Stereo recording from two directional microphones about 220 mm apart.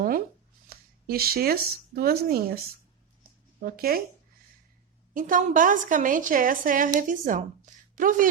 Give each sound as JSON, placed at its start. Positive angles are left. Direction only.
{"t": 0.7, "sound": "speech", "side_deg": -45}
{"t": 3.6, "sound": "speech", "side_deg": -40}
{"t": 5.1, "sound": "a woman's voice", "side_deg": -40}